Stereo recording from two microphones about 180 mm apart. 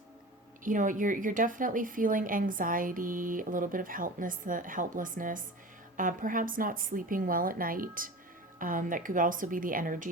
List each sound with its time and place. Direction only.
0.6 s a woman's voice: 45° right (ahead or behind)